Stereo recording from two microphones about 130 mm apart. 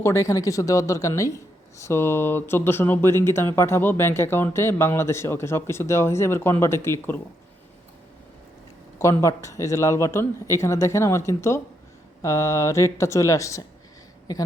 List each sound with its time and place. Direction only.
0.0 s speech: 25° left (ahead or behind)
9.0 s speech: 20° left (ahead or behind)